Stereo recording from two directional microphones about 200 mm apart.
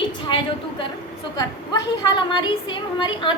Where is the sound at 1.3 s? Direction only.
20° left (ahead or behind).